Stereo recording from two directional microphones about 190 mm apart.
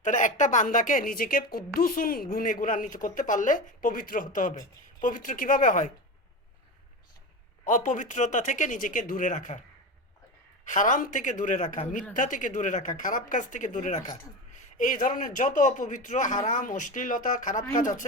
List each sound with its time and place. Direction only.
0.0 s a woman's voice: 40° left (ahead or behind)
7.6 s speech: 40° left (ahead or behind)
10.7 s a woman's voice: 40° left (ahead or behind)